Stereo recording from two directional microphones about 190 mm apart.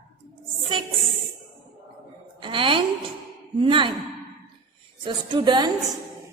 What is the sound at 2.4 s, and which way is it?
A woman's voice, 25° right (ahead or behind).